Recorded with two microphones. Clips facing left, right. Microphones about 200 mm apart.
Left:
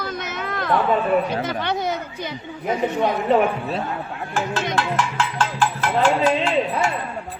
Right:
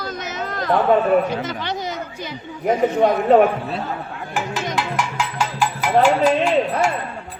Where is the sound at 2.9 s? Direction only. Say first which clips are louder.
Right 5 dB; 50° right (ahead or behind).